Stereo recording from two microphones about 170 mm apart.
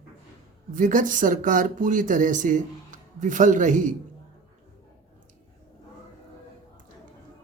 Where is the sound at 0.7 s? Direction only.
50° right (ahead or behind).